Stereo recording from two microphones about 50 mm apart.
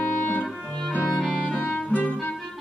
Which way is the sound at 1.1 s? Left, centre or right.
Centre.